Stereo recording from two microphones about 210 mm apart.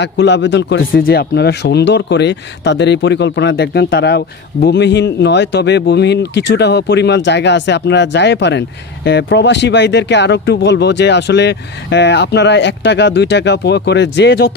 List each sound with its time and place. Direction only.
0.0 s speech: 55° left (ahead or behind)